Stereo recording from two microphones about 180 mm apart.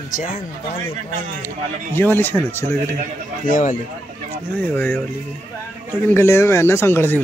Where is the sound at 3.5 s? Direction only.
45° left (ahead or behind).